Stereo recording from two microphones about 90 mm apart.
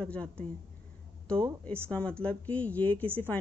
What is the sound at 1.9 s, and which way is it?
Speech, 15° left (ahead or behind).